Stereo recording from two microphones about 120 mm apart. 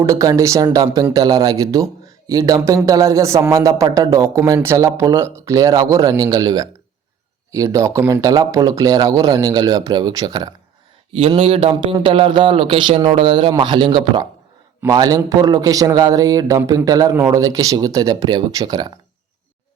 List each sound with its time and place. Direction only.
0.0 s a man's voice: 25° right (ahead or behind)
11.1 s a man's voice: 50° right (ahead or behind)